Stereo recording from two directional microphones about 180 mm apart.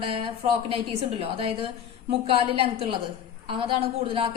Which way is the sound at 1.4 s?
30° right (ahead or behind).